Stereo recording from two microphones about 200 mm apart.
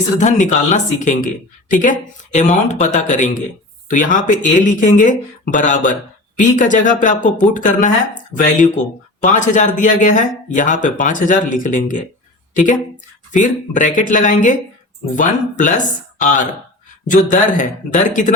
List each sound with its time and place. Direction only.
0.2 s speech: 35° left (ahead or behind)
13.3 s speech: 40° left (ahead or behind)